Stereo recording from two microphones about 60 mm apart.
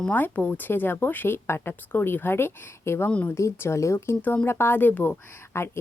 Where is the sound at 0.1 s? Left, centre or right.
Left.